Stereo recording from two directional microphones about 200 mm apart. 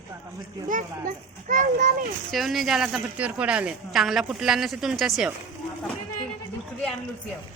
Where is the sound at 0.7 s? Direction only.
40° right (ahead or behind).